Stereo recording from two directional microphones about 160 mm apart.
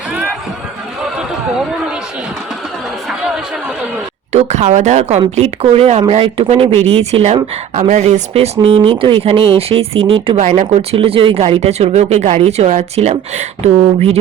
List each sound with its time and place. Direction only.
4.3 s speech: 45° right (ahead or behind)